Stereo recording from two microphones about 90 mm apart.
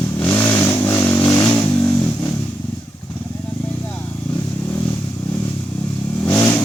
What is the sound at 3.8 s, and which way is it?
Vehicle, 15° left (ahead or behind).